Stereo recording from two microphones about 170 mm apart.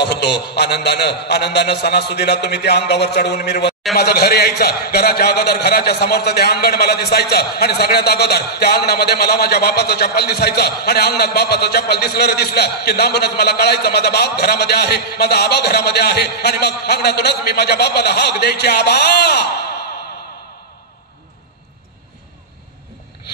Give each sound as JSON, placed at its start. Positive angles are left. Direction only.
{"t": 0.0, "sound": "a man's voice", "side_deg": 75}